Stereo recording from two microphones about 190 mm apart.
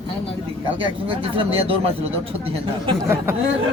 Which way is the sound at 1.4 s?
30° right (ahead or behind).